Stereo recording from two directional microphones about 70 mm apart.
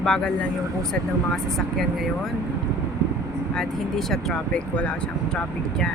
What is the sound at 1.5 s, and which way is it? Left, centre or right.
Speech, centre.